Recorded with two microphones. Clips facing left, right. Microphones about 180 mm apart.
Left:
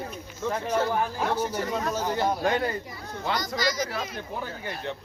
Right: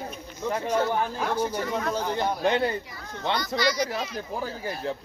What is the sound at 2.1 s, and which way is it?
Speech, 20° right (ahead or behind).